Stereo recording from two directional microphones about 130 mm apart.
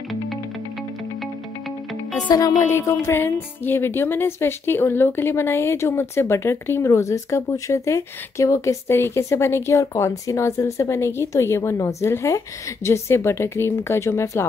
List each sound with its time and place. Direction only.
2.2 s speech: 30° left (ahead or behind)